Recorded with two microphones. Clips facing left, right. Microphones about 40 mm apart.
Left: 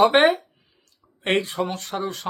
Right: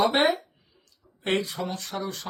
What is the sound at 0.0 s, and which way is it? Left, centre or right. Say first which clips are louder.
Speech: left 6 dB; left.